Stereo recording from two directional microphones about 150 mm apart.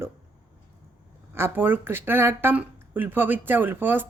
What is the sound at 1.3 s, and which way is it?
A woman's voice, 15° right (ahead or behind).